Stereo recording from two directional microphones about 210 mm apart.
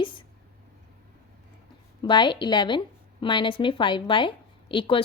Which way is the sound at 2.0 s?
20° left (ahead or behind).